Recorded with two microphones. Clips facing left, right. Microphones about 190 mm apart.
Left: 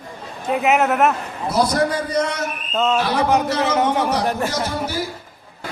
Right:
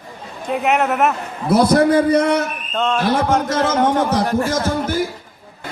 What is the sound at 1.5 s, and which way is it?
Speech, 55° right (ahead or behind).